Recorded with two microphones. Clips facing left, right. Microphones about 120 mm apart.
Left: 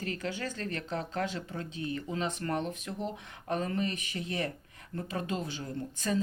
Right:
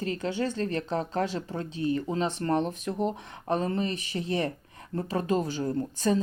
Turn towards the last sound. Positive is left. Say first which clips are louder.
# right 7 dB
turn(degrees=-30)  # may be behind; listen again after turning